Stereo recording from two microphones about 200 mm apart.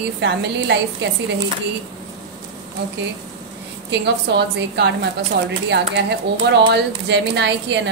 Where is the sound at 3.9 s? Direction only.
60° right (ahead or behind).